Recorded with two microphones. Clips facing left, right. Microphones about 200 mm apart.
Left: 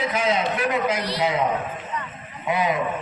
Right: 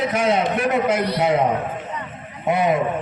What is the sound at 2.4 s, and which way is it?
Speech, 50° right (ahead or behind).